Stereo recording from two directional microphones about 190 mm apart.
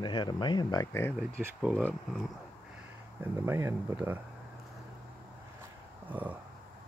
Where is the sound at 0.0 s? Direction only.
25° left (ahead or behind).